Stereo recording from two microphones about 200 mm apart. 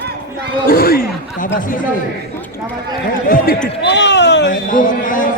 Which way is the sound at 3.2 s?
45° left (ahead or behind).